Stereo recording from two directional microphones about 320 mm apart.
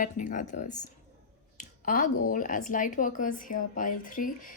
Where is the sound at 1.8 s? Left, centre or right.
Left.